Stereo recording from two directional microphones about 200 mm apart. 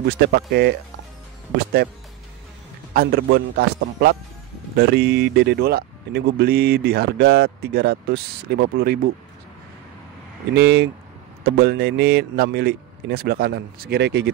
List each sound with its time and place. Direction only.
0.2 s a man's voice: 55° right (ahead or behind)
2.9 s speech: 50° right (ahead or behind)
10.5 s a man's voice: 60° right (ahead or behind)